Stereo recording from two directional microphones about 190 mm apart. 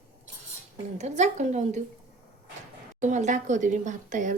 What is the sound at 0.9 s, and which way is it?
Speech, 35° right (ahead or behind).